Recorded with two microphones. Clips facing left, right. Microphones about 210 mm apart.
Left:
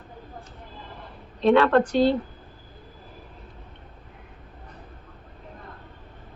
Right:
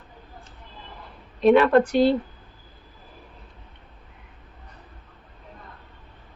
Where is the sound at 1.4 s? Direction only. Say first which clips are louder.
Right 2 dB; 15° right (ahead or behind).